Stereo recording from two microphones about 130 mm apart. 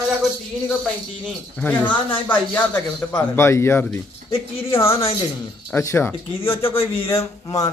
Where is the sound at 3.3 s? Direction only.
20° left (ahead or behind).